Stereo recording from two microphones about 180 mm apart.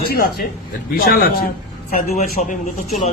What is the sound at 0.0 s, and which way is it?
A man's voice, 55° left (ahead or behind).